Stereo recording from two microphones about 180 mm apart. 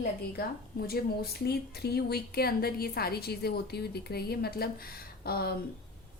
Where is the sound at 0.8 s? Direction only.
60° left (ahead or behind).